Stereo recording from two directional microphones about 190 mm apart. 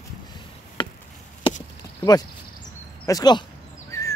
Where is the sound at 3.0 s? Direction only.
20° left (ahead or behind).